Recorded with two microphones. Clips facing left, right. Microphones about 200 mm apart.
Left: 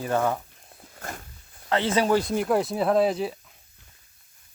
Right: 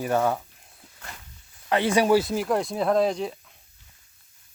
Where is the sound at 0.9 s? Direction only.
50° left (ahead or behind).